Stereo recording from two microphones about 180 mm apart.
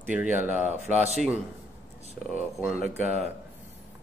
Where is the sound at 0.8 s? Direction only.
35° right (ahead or behind).